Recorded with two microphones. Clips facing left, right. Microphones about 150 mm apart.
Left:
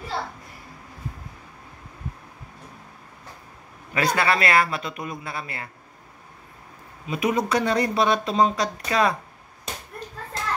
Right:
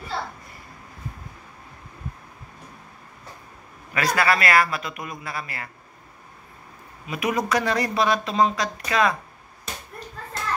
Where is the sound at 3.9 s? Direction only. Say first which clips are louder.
Even; 30° left (ahead or behind).